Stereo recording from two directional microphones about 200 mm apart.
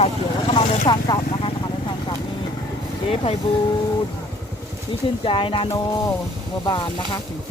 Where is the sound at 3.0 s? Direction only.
30° left (ahead or behind).